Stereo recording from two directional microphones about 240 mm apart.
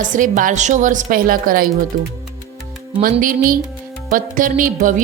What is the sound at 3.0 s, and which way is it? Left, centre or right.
A woman's voice, right.